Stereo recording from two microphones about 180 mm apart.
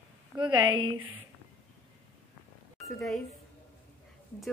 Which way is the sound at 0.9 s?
90° right.